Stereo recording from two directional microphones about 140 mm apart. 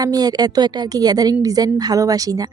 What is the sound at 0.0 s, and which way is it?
A woman's voice, 25° right (ahead or behind).